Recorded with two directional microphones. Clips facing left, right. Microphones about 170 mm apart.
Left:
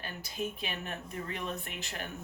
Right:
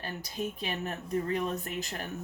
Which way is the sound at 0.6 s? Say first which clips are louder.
Right 4 dB; 35° right (ahead or behind).